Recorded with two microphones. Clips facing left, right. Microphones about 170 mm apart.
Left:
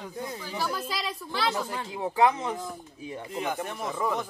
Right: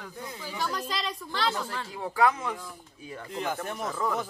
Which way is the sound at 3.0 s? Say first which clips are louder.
Left 2 dB; 20° left (ahead or behind).